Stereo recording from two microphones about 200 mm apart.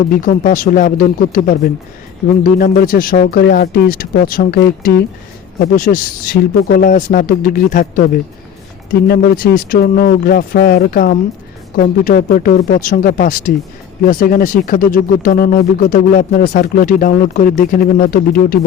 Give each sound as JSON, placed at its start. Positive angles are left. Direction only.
{"t": 0.2, "sound": "speech", "side_deg": 40}